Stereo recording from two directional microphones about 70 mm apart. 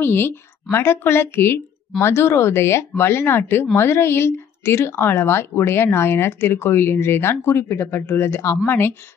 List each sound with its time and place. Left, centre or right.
0.0 s speech: left